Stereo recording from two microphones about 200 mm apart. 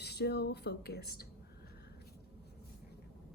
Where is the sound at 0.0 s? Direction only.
55° left (ahead or behind).